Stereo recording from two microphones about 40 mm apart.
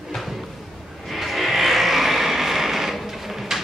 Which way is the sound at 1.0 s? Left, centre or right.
Centre.